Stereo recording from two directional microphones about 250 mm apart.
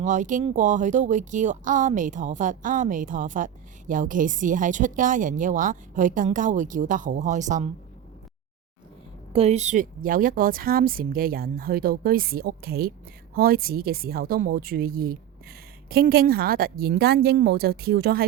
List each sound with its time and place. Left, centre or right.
0.0 s speech: right
9.3 s speech: right